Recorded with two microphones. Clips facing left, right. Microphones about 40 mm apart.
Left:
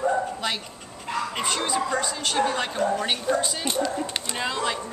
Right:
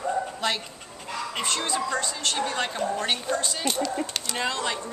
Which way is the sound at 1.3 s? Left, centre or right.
Centre.